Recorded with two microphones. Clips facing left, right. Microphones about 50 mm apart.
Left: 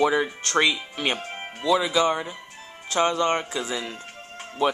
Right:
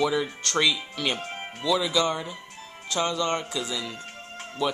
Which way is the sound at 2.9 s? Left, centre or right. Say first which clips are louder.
Left 4 dB; left.